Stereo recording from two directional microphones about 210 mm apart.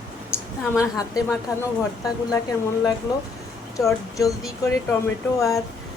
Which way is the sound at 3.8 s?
Centre (ahead or behind).